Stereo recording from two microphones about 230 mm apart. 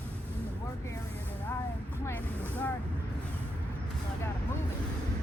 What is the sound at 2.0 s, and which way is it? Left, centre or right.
Vehicle, centre.